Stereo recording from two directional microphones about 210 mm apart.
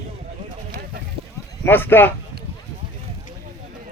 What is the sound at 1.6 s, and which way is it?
Speech, 10° left (ahead or behind).